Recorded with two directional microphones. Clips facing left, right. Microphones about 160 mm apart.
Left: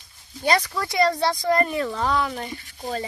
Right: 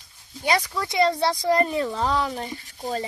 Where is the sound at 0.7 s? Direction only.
10° right (ahead or behind).